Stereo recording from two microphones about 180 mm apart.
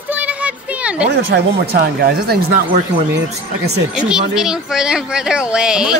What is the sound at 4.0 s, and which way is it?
A child's voice, 5° right (ahead or behind).